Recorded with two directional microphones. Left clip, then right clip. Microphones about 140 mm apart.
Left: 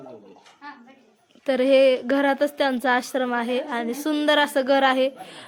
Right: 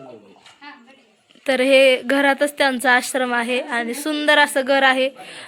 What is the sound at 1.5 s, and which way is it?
A woman's voice, 5° left (ahead or behind).